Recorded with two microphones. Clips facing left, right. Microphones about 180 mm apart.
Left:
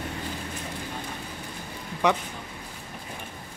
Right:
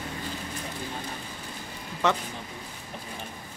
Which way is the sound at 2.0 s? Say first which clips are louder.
Left 2 dB; 15° left (ahead or behind).